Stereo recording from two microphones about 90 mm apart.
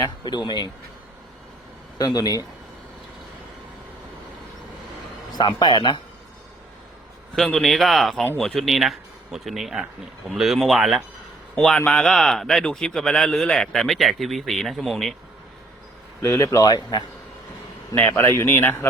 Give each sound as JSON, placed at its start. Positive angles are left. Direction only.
{"t": 0.3, "sound": "speech", "side_deg": 55}
{"t": 2.0, "sound": "speech", "side_deg": 45}
{"t": 5.5, "sound": "speech", "side_deg": 50}
{"t": 7.3, "sound": "speech", "side_deg": 5}
{"t": 11.9, "sound": "speech", "side_deg": 10}
{"t": 16.2, "sound": "speech", "side_deg": 35}
{"t": 18.2, "sound": "speech", "side_deg": 30}